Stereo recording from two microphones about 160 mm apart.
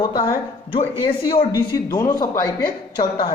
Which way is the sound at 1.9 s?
25° left (ahead or behind).